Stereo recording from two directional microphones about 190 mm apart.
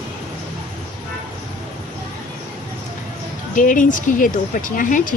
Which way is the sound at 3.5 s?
45° left (ahead or behind).